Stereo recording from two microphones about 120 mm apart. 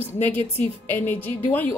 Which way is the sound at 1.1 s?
15° left (ahead or behind).